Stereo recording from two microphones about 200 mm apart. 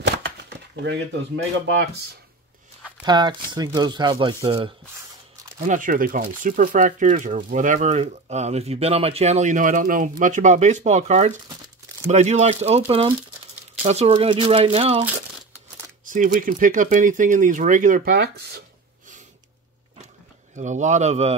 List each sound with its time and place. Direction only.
3.0 s speech: 20° right (ahead or behind)
5.7 s speech: 40° right (ahead or behind)
16.1 s speech: 40° right (ahead or behind)
20.5 s speech: 35° right (ahead or behind)